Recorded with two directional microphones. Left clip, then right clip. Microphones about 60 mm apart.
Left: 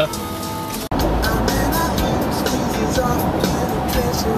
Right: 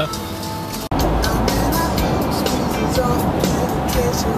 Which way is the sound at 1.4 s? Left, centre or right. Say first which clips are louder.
Even; left.